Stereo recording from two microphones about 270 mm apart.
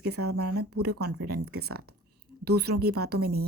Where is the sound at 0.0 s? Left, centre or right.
Right.